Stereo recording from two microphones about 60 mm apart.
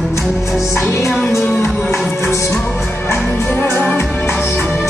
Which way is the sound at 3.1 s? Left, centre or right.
Left.